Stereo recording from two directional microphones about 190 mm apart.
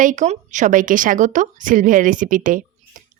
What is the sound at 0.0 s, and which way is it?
Speech, 40° right (ahead or behind).